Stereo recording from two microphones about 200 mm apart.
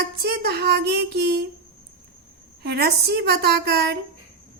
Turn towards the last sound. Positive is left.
turn(degrees=-55)  # may be behind; listen again after turning